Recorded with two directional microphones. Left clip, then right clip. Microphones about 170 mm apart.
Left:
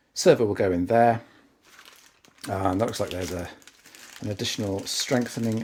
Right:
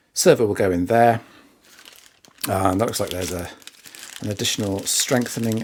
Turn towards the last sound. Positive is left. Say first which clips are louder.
# right 4 dB
turn(degrees=-30)  # may be behind; listen again after turning